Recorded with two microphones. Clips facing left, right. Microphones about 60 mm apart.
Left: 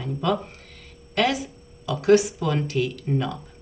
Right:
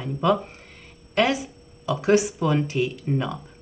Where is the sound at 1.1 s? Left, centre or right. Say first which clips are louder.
Right 1 dB; right.